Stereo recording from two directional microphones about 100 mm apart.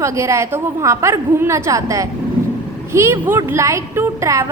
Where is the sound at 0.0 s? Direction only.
30° right (ahead or behind).